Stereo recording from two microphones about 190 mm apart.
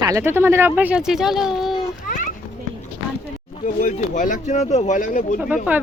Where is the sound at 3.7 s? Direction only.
45° left (ahead or behind).